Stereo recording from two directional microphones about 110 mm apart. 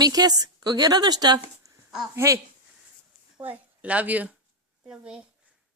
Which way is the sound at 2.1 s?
25° right (ahead or behind).